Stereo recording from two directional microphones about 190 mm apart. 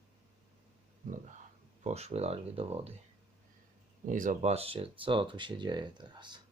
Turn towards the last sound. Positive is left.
turn(degrees=-25)  # may be behind; listen again after turning